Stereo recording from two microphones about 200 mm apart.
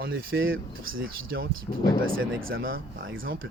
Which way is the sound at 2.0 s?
80° right.